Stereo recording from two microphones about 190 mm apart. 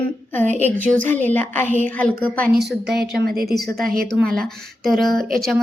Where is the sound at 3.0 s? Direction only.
55° right (ahead or behind).